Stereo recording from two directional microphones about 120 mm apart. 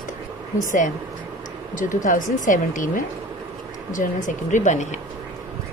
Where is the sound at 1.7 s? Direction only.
90° left.